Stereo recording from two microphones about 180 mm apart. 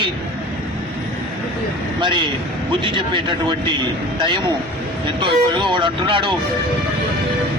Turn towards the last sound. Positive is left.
turn(degrees=-25)  # may be behind; listen again after turning